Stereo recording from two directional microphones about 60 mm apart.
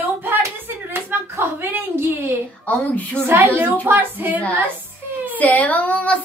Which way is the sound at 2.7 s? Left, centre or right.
Left.